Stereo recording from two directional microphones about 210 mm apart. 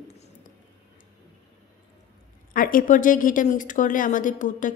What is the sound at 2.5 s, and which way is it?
Speech, 40° left (ahead or behind).